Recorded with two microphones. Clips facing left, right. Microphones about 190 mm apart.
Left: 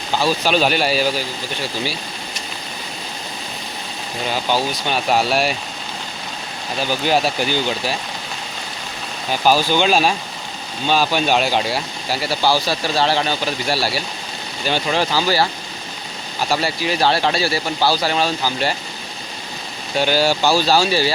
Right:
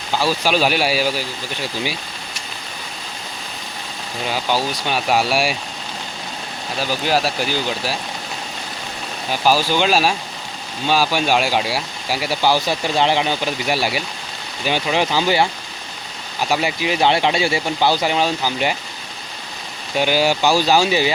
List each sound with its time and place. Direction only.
0.4 s speech: 10° right (ahead or behind)
4.9 s speech: 10° right (ahead or behind)
7.0 s speech: centre (ahead or behind)
9.5 s speech: 5° right (ahead or behind); by 15.4 s 20° right (ahead or behind)
16.5 s speech: 15° right (ahead or behind)
20.0 s speech: 15° right (ahead or behind)